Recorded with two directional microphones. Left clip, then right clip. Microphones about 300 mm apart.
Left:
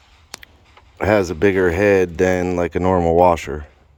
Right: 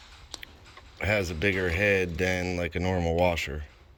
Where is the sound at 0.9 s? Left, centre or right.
Centre.